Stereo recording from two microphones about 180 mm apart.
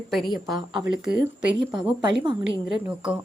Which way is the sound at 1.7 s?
25° right (ahead or behind).